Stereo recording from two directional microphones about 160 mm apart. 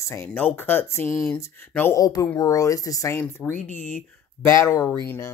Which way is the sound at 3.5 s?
50° left (ahead or behind).